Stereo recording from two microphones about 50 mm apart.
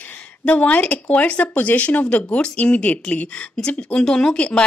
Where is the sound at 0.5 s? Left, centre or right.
Left.